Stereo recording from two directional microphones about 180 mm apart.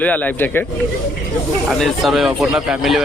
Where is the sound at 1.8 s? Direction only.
Centre (ahead or behind).